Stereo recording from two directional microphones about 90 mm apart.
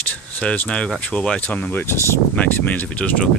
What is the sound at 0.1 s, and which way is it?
Speech, 15° left (ahead or behind).